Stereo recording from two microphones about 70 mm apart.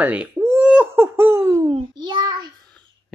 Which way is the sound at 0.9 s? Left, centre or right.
Right.